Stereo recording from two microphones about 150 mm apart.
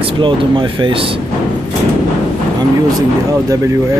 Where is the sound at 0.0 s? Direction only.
35° right (ahead or behind).